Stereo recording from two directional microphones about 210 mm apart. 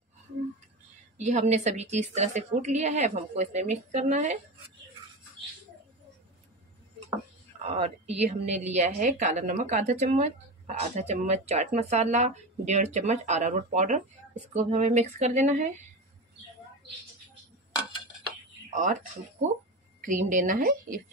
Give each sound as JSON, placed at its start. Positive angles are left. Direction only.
{"t": 1.1, "sound": "a woman's voice", "side_deg": -35}
{"t": 7.6, "sound": "a woman's voice", "side_deg": -30}
{"t": 18.8, "sound": "a woman's voice", "side_deg": -35}